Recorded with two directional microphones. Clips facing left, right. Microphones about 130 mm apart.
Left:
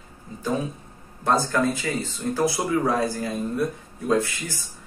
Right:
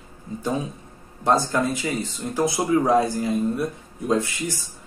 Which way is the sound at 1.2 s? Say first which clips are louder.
Right 1 dB; 20° right (ahead or behind).